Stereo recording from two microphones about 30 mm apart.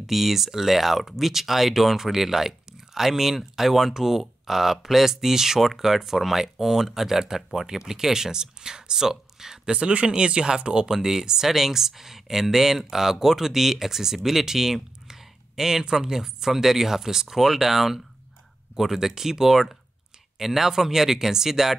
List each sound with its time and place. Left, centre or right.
0.0 s speech: centre
9.7 s speech: right
10.9 s speech: centre